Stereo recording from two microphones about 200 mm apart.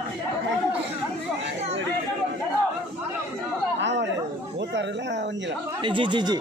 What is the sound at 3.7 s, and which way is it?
Chatter, 60° right (ahead or behind).